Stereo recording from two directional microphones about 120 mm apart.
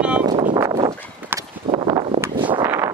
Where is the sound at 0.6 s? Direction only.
35° right (ahead or behind).